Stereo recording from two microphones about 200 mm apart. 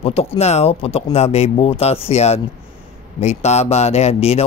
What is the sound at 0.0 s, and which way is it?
Speech, 30° left (ahead or behind).